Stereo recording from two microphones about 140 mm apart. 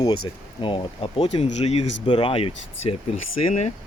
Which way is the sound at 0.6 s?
35° left (ahead or behind).